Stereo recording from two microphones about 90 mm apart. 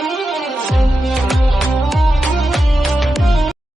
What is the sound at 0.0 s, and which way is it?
Music, centre (ahead or behind).